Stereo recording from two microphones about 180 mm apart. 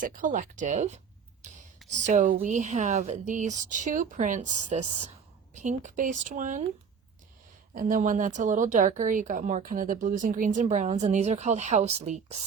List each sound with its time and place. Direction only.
0.0 s a woman's voice: 45° right (ahead or behind)
7.7 s a woman's voice: 50° right (ahead or behind)